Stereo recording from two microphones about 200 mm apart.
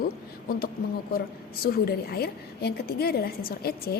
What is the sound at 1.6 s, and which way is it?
A woman's voice, 50° left (ahead or behind).